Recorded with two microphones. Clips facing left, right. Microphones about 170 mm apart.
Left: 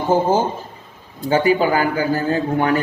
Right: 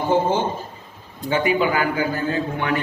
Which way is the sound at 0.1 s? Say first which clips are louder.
Left 4 dB; 40° left (ahead or behind).